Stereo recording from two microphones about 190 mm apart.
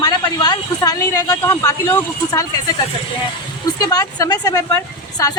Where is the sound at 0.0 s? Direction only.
20° left (ahead or behind).